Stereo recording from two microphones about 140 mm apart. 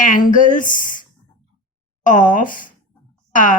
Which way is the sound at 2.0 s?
70° left (ahead or behind).